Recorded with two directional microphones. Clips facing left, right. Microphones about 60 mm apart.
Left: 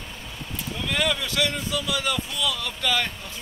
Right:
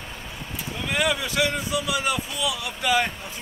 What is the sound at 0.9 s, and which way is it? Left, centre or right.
Speech, centre.